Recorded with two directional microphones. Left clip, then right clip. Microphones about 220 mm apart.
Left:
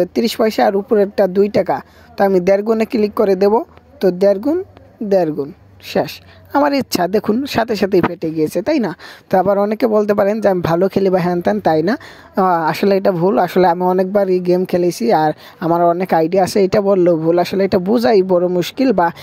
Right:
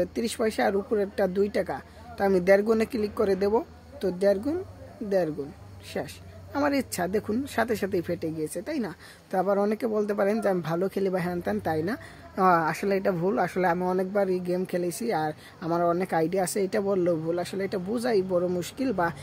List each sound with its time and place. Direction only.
0.0 s speech: 40° left (ahead or behind)
5.9 s speech: 40° left (ahead or behind)